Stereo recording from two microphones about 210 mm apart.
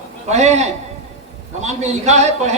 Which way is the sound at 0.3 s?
35° right (ahead or behind).